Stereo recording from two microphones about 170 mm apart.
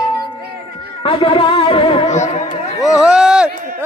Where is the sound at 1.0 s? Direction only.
30° left (ahead or behind).